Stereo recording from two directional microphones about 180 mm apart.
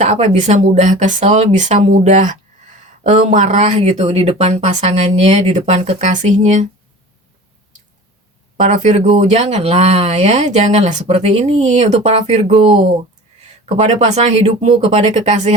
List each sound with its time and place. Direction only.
0.0 s speech: 40° right (ahead or behind)
8.6 s speech: 40° right (ahead or behind)